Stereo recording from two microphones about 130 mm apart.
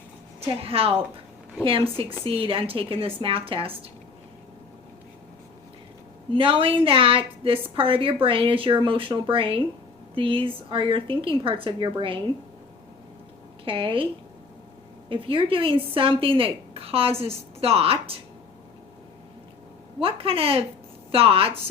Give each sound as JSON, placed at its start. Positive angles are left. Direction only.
{"t": 0.6, "sound": "a woman's voice", "side_deg": -45}
{"t": 6.3, "sound": "a woman's voice", "side_deg": -45}
{"t": 13.7, "sound": "a woman's voice", "side_deg": -45}
{"t": 15.1, "sound": "a woman's voice", "side_deg": -40}
{"t": 20.0, "sound": "a woman's voice", "side_deg": -45}